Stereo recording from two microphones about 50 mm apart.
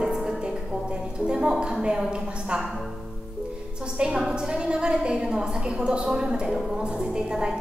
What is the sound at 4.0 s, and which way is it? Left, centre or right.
A woman's voice, centre.